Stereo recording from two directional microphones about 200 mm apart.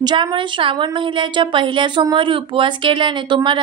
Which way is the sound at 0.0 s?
25° right (ahead or behind).